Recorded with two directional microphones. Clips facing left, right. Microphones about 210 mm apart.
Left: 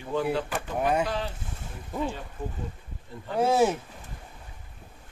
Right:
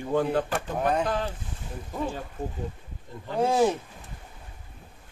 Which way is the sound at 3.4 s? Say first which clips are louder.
Even; 5° left (ahead or behind).